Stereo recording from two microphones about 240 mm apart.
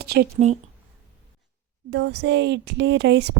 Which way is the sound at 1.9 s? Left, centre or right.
Right.